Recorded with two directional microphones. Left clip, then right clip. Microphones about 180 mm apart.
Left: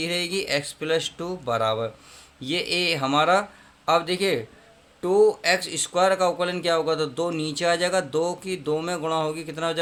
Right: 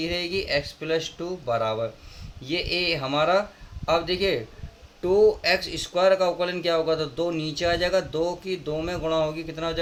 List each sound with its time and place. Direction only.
0.0 s speech: 40° left (ahead or behind)